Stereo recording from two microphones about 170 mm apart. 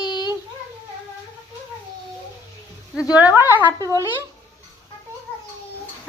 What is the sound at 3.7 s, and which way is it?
Speech, 20° right (ahead or behind).